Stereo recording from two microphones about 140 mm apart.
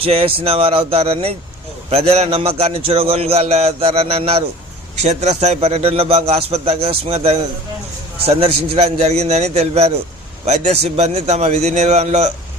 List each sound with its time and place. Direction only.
0.0 s a man's voice: 45° right (ahead or behind)